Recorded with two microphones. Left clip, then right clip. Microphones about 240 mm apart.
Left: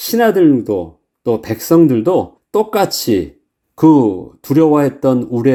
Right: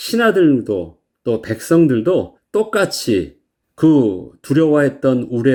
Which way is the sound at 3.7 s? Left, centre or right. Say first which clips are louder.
Left 3 dB; left.